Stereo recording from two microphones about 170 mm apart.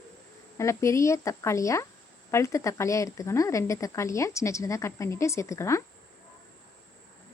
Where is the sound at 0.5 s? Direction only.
15° left (ahead or behind).